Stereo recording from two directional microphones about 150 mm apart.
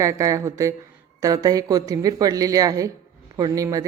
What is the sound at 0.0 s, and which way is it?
A woman's voice, 20° right (ahead or behind).